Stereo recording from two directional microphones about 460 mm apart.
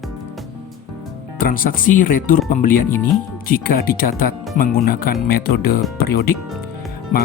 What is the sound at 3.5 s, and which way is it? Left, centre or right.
Speech, centre.